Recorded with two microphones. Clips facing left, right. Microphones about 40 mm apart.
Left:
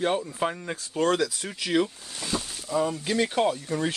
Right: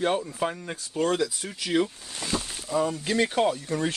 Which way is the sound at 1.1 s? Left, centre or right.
Left.